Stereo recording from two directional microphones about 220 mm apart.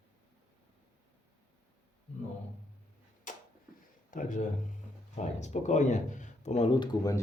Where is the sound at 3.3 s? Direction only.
35° left (ahead or behind).